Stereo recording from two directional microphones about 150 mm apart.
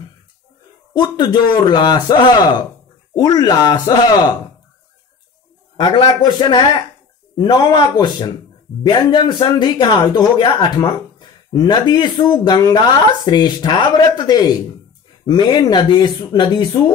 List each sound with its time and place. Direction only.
0.9 s speech: 30° left (ahead or behind)
5.8 s speech: 35° left (ahead or behind)